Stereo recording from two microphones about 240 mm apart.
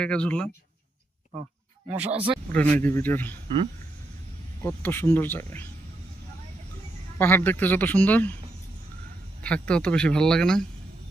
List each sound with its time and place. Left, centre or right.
0.0 s speech: centre
2.0 s speech: centre
2.5 s speech: centre
4.6 s speech: centre
7.2 s speech: centre
9.4 s speech: centre